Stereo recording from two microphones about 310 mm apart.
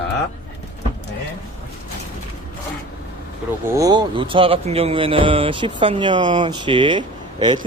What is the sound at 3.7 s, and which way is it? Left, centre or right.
Speech, centre.